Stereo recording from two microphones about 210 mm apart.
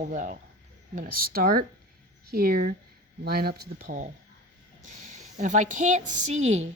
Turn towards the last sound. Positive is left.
turn(degrees=-35)  # may be behind; listen again after turning